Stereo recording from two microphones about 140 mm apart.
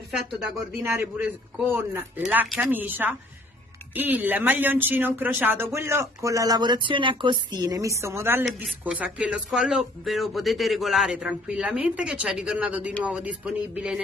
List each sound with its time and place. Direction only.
0.8 s speech: 15° right (ahead or behind)